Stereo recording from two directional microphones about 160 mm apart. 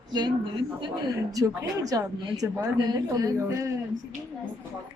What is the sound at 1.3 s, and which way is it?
A woman's voice, 20° right (ahead or behind).